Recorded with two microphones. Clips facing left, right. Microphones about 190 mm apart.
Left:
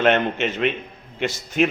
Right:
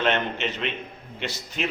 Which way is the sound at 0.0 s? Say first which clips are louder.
Left 6 dB; 50° left (ahead or behind).